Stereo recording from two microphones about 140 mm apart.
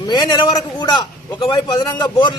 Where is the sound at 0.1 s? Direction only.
30° left (ahead or behind).